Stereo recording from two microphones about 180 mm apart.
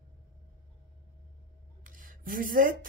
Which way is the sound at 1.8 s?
50° right (ahead or behind).